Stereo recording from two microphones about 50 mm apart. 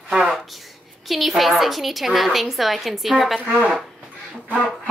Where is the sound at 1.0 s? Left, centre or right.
Centre.